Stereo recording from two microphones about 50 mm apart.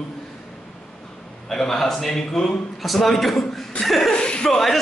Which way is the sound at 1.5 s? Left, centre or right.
Centre.